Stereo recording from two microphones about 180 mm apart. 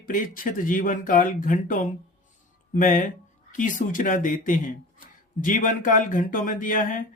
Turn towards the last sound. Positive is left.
turn(degrees=45)  # may be behind; listen again after turning